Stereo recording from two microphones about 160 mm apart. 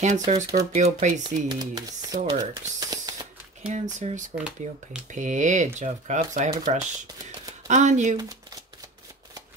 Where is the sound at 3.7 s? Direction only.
50° right (ahead or behind).